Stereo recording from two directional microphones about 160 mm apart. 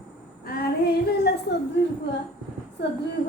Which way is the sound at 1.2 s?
90° left.